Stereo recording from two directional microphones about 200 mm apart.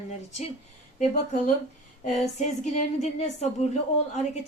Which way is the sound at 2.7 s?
35° left (ahead or behind).